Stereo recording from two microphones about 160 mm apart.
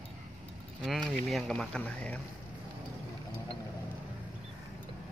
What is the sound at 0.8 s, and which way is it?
Speech, centre (ahead or behind).